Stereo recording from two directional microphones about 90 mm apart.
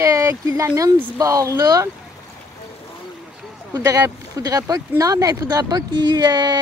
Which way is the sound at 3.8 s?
40° right (ahead or behind).